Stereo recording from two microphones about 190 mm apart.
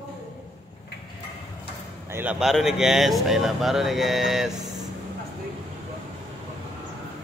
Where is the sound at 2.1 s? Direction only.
10° right (ahead or behind).